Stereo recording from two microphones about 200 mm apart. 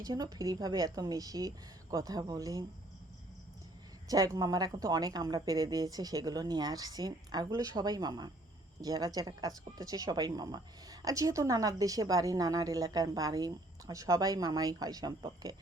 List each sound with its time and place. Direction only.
0.0 s a woman's voice: 20° right (ahead or behind)
4.1 s a woman's voice: 20° right (ahead or behind)